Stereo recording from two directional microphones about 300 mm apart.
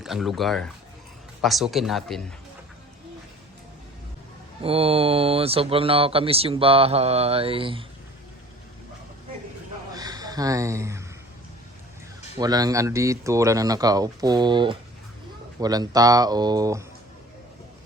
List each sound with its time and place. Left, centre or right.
0.0 s speech: centre
4.6 s speech: centre
9.9 s a sound: centre
12.4 s speech: centre